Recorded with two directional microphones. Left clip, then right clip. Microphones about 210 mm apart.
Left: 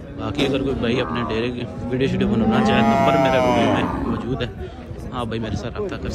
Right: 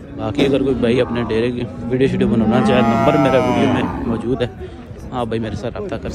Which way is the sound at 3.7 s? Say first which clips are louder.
Right 1 dB; 5° left (ahead or behind).